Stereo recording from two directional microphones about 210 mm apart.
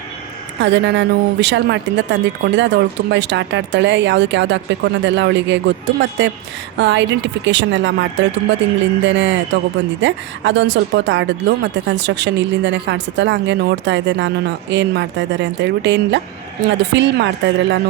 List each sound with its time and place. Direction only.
0.6 s speech: 55° right (ahead or behind)
9.0 s speech: 60° right (ahead or behind)